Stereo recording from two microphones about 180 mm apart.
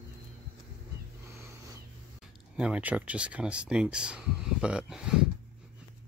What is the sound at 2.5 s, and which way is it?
Speech, 5° right (ahead or behind).